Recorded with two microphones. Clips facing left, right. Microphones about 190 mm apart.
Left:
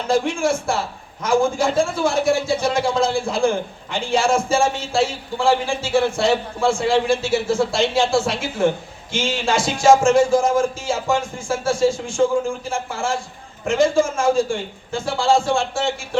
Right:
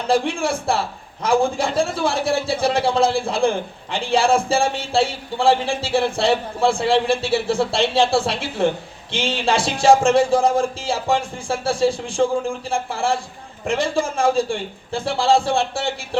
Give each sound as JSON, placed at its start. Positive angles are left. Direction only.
{"t": 0.1, "sound": "speech", "side_deg": -35}